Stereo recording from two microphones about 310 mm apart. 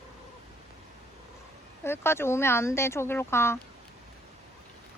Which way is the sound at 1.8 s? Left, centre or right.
Centre.